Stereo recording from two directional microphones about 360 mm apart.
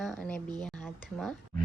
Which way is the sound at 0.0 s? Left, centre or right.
Centre.